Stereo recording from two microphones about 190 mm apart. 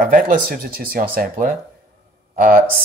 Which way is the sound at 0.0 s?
45° right (ahead or behind).